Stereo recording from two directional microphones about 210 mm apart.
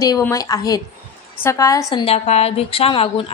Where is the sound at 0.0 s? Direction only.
15° left (ahead or behind).